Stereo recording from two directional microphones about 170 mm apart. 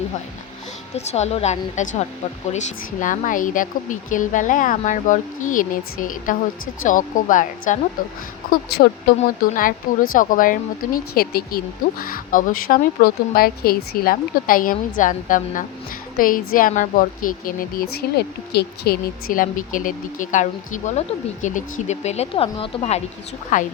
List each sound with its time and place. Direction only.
0.9 s speech: 40° left (ahead or behind)
9.1 s a woman's voice: 65° left (ahead or behind)
9.6 s a woman's voice: 55° left (ahead or behind); by 23.0 s 35° left (ahead or behind)
23.5 s speech: 50° left (ahead or behind)